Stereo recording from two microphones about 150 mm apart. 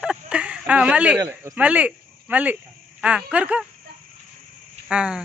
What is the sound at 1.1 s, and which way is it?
Speech, 20° right (ahead or behind).